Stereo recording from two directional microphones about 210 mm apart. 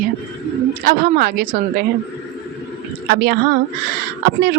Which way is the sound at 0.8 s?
45° right (ahead or behind).